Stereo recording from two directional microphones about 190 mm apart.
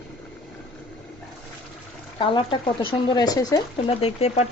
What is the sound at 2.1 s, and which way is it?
A woman's voice, 25° left (ahead or behind).